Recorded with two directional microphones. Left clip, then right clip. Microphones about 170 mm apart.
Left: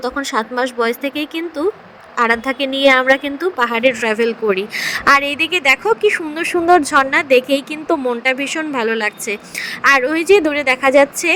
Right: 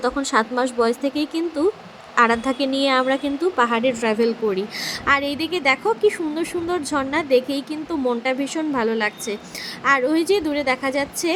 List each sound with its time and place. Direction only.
0.2 s a woman's voice: 25° left (ahead or behind)